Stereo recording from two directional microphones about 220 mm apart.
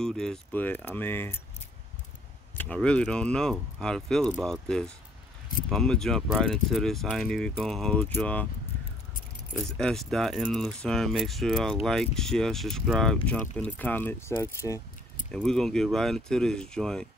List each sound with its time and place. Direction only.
0.0 s speech: 5° left (ahead or behind)
2.5 s speech: 5° left (ahead or behind)
9.6 s speech: 5° left (ahead or behind)
15.3 s speech: centre (ahead or behind)